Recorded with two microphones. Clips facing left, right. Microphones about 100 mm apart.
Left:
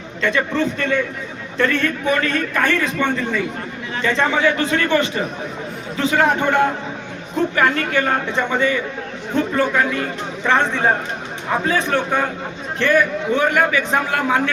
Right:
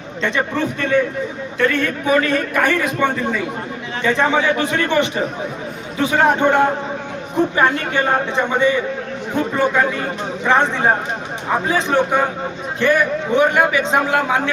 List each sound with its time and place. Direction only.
0.2 s a man's voice: 20° right (ahead or behind)
1.5 s a man's voice: 5° right (ahead or behind)
11.7 s a man's voice: 15° right (ahead or behind)